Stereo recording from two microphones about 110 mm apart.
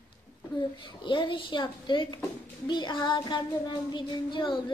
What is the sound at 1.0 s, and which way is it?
Child singing, 45° left (ahead or behind).